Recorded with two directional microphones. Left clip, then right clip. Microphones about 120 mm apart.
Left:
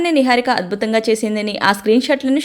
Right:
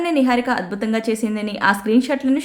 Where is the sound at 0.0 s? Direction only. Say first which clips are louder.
Left 4 dB; 30° left (ahead or behind).